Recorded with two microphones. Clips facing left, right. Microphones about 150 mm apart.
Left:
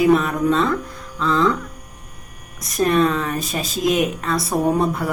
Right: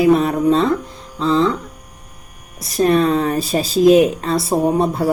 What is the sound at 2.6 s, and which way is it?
Speech, 30° right (ahead or behind).